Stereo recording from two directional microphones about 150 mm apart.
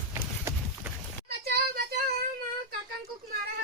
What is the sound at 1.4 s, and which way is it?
Child singing, 90° right.